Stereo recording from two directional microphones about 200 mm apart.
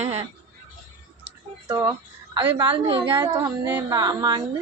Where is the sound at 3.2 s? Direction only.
15° right (ahead or behind).